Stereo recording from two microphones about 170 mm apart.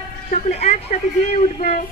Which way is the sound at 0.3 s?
40° left (ahead or behind).